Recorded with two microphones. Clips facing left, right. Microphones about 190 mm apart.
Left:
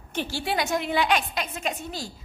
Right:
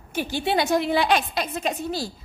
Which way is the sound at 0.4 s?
25° right (ahead or behind).